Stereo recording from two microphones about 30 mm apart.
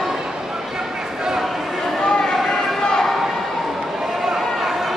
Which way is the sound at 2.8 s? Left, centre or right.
Left.